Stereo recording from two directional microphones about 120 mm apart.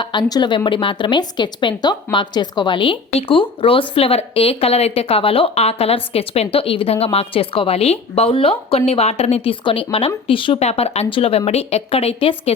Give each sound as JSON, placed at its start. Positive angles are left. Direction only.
{"t": 0.0, "sound": "a woman's voice", "side_deg": 35}